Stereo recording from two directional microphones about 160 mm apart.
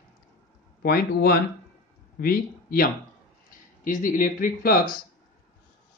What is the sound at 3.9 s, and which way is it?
Speech, 55° left (ahead or behind).